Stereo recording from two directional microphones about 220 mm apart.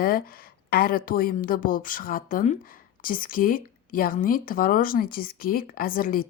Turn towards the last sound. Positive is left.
turn(degrees=40)  # may be behind; listen again after turning